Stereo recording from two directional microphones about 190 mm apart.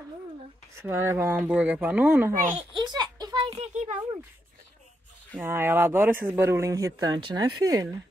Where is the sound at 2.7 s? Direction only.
20° right (ahead or behind); by 4.0 s 40° right (ahead or behind).